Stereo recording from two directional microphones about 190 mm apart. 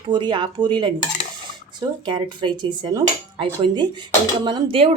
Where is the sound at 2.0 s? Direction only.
25° right (ahead or behind).